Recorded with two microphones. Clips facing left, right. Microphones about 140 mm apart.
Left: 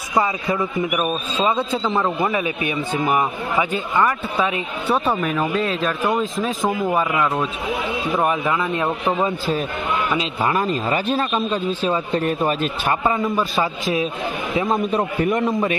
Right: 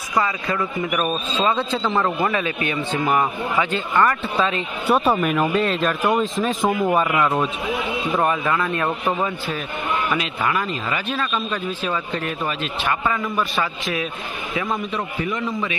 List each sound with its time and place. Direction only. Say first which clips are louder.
0.1 s a man's voice: left 2 dB; 20° left (ahead or behind)
0.8 s a man's voice: left 1 dB; 5° left (ahead or behind)
5.0 s speech: right 2 dB; 5° right (ahead or behind)
8.3 s a man's voice: left 1 dB; 15° left (ahead or behind)
14.9 s a man's voice: left 6 dB; 45° left (ahead or behind)